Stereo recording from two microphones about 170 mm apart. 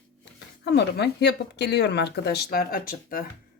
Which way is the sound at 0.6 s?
90° left.